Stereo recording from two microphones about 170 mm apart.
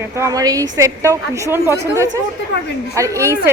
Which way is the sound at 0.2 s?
20° right (ahead or behind).